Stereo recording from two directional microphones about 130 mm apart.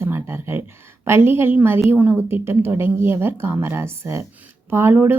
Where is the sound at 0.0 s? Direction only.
20° right (ahead or behind).